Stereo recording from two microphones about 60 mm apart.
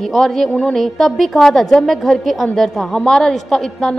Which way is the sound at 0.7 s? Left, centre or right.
Centre.